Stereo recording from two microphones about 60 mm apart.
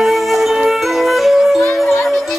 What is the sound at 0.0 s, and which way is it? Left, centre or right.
Music, centre.